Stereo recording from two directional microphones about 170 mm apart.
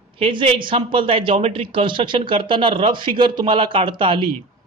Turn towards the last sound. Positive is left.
turn(degrees=-30)  # may be behind; listen again after turning